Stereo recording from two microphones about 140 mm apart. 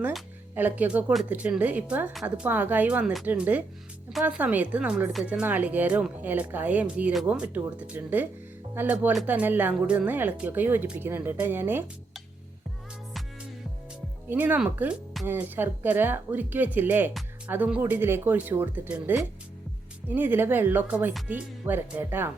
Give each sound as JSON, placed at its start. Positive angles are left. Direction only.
{"t": 0.5, "sound": "speech", "side_deg": -10}
{"t": 14.3, "sound": "speech", "side_deg": -10}